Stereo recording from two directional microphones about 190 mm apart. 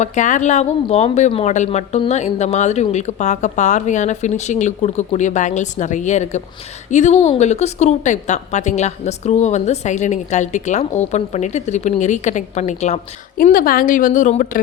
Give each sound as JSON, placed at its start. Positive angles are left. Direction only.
{"t": 0.0, "sound": "speech", "side_deg": 40}
{"t": 13.3, "sound": "a woman's voice", "side_deg": 45}